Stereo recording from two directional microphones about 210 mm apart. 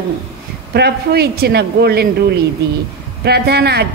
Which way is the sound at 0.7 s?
50° right (ahead or behind).